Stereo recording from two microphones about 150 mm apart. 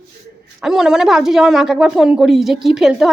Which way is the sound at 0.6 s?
5° right (ahead or behind).